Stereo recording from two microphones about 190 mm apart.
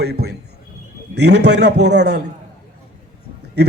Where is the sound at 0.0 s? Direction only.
55° right (ahead or behind).